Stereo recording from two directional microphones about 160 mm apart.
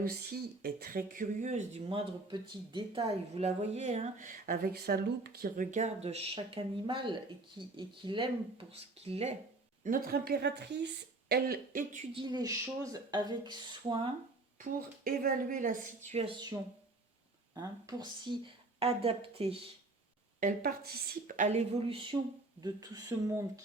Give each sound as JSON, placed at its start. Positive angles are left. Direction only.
{"t": 0.0, "sound": "speech", "side_deg": -80}
{"t": 3.3, "sound": "speech", "side_deg": -40}
{"t": 5.7, "sound": "speech", "side_deg": -45}
{"t": 9.8, "sound": "a woman's voice", "side_deg": -65}
{"t": 12.1, "sound": "speech", "side_deg": -30}
{"t": 14.6, "sound": "speech", "side_deg": -65}
{"t": 16.0, "sound": "speech", "side_deg": -40}
{"t": 17.5, "sound": "speech", "side_deg": -20}
{"t": 20.4, "sound": "a woman's voice", "side_deg": -65}
{"t": 21.3, "sound": "speech", "side_deg": -45}